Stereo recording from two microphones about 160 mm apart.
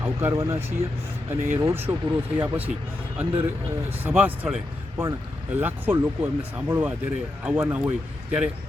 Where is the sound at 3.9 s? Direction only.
15° right (ahead or behind).